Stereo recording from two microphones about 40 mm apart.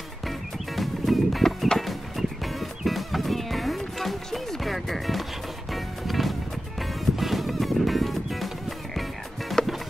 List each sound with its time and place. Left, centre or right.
0.7 s music: centre
9.6 s music: centre